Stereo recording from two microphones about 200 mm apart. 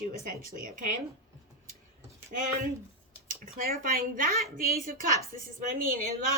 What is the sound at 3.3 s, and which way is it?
A woman's voice, 45° right (ahead or behind).